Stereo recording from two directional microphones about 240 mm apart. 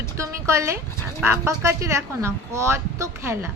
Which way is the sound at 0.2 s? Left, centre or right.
Centre.